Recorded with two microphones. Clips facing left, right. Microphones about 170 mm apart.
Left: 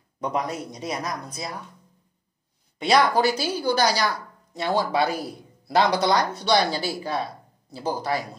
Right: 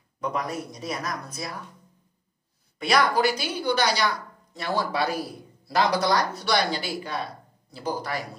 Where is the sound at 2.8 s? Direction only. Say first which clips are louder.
Left 3 dB; 25° left (ahead or behind).